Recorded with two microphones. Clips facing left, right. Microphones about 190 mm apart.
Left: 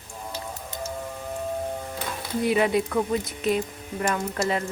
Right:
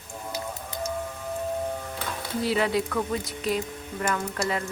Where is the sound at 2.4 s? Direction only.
20° left (ahead or behind).